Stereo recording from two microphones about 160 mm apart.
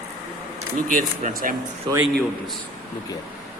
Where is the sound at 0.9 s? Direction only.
55° right (ahead or behind).